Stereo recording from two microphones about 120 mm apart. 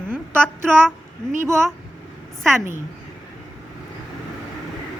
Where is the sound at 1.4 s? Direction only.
20° right (ahead or behind).